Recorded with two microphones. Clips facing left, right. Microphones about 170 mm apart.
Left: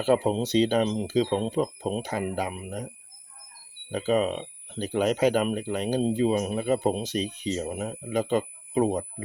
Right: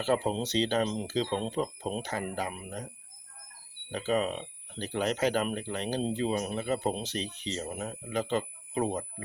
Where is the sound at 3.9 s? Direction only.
10° left (ahead or behind).